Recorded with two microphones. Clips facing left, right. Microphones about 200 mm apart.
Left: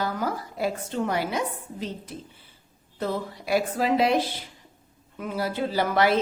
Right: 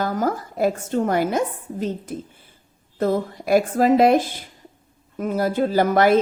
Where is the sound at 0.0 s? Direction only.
45° right (ahead or behind).